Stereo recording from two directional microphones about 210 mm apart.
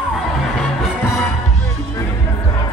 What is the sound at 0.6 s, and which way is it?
Music, centre (ahead or behind).